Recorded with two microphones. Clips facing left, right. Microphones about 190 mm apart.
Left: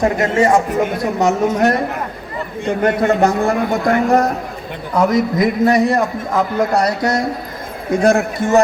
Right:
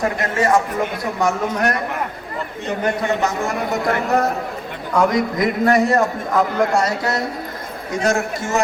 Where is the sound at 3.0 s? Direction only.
50° left (ahead or behind).